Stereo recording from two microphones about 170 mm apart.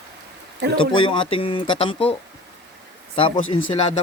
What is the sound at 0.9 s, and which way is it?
Speech, 30° left (ahead or behind).